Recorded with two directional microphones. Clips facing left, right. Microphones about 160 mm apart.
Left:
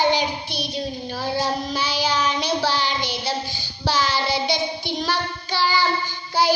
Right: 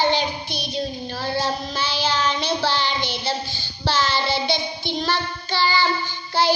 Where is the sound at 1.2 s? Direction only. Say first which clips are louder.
Left 1 dB; 10° left (ahead or behind).